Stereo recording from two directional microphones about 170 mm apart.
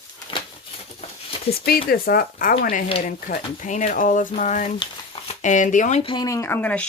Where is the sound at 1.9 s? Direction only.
60° left (ahead or behind).